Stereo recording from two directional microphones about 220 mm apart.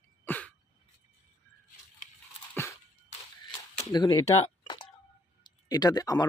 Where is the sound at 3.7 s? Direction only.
20° left (ahead or behind).